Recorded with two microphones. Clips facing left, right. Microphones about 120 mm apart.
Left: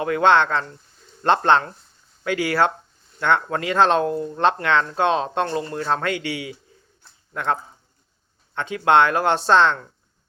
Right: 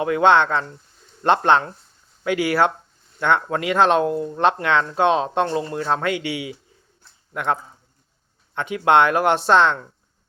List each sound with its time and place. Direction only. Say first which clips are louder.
0.0 s speech: right 1 dB; 15° right (ahead or behind)
8.7 s speech: right 1 dB; 20° right (ahead or behind)